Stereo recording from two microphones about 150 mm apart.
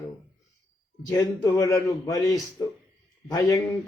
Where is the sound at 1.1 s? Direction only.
25° left (ahead or behind).